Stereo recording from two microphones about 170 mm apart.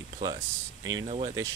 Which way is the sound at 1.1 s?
40° right (ahead or behind).